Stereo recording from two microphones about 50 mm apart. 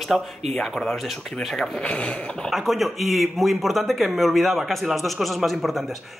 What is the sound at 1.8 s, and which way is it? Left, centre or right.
Speech, centre.